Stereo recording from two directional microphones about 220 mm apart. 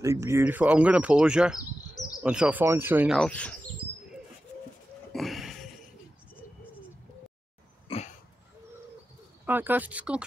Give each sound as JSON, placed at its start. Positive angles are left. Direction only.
{"t": 0.0, "sound": "speech", "side_deg": -15}
{"t": 2.0, "sound": "bird", "side_deg": 15}
{"t": 2.2, "sound": "speech", "side_deg": -5}
{"t": 3.2, "sound": "speech", "side_deg": 5}
{"t": 5.1, "sound": "a sound", "side_deg": 0}
{"t": 7.9, "sound": "throat clearing", "side_deg": 25}
{"t": 9.5, "sound": "speech", "side_deg": -10}